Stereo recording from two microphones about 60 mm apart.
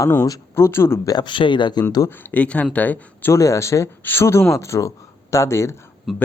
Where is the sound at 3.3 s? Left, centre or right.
Left.